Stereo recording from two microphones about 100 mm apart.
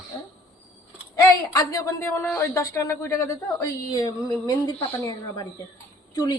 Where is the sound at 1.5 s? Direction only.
30° left (ahead or behind).